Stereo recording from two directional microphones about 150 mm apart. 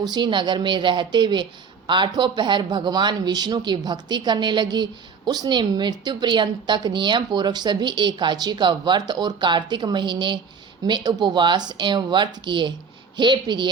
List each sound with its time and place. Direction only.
0.0 s speech: 30° right (ahead or behind)